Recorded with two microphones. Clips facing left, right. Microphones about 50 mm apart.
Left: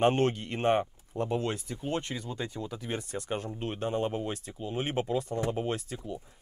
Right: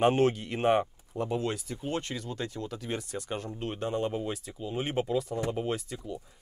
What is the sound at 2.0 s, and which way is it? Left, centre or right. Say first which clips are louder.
Speech: even; centre.